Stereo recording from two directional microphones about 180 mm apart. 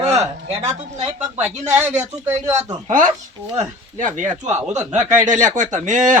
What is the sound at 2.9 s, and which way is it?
Speech, 45° right (ahead or behind).